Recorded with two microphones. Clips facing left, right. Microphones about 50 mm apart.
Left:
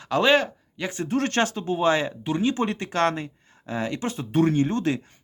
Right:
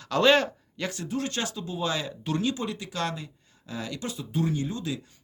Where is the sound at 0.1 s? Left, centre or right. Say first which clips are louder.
Left 1 dB; centre.